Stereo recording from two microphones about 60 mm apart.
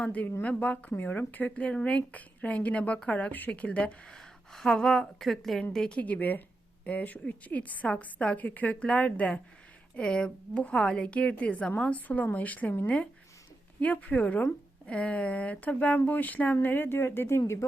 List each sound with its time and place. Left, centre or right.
0.0 s speech: left
0.9 s speech: left; by 4.2 s centre
4.2 s speech: centre
6.0 s speech: left
17.4 s speech: left